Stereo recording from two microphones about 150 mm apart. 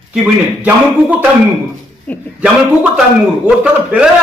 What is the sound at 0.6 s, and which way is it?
Speech, 10° right (ahead or behind).